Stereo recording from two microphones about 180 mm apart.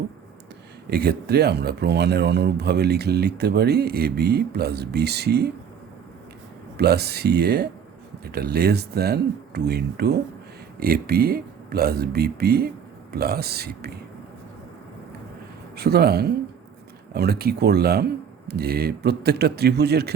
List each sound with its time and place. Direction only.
0.9 s speech: 60° right (ahead or behind)
6.7 s speech: 65° right (ahead or behind)
15.7 s speech: 65° right (ahead or behind)